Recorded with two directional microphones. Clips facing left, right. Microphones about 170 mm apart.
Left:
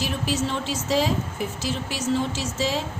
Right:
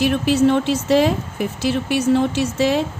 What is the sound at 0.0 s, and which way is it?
A woman's voice, 60° right (ahead or behind).